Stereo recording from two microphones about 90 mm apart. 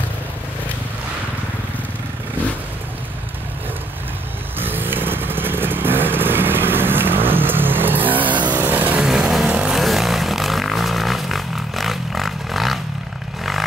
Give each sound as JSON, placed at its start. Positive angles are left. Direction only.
{"t": 4.6, "sound": "motorcycle", "side_deg": -25}
{"t": 8.5, "sound": "vehicle", "side_deg": -20}
{"t": 9.0, "sound": "vehicle", "side_deg": -5}
{"t": 9.8, "sound": "vehicle", "side_deg": 0}